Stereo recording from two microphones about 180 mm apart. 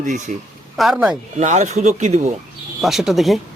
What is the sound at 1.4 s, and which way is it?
Speech, 40° right (ahead or behind).